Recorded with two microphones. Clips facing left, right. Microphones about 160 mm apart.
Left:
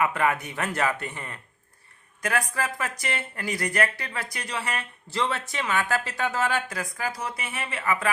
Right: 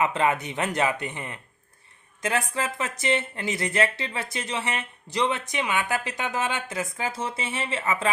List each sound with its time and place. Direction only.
0.0 s speech: 20° right (ahead or behind)